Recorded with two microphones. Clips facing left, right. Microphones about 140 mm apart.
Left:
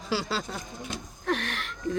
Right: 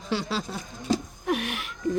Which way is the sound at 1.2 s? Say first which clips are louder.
Right 2 dB; 10° right (ahead or behind).